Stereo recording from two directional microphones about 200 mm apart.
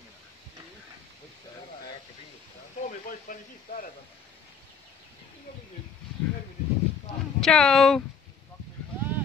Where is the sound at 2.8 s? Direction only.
45° left (ahead or behind).